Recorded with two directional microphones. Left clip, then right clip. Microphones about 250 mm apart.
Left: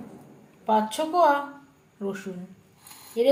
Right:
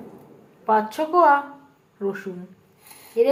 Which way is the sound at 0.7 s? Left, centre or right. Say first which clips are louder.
Right 3 dB; centre.